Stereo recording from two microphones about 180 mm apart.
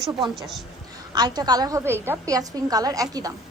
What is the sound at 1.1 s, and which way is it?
A woman's voice, 20° right (ahead or behind).